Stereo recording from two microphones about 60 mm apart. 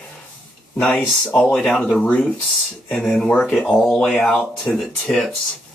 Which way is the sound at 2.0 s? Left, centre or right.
Left.